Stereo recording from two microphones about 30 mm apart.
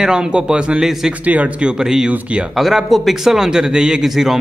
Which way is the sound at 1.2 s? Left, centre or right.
Right.